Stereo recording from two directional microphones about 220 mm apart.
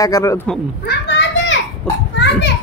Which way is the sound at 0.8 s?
50° left (ahead or behind).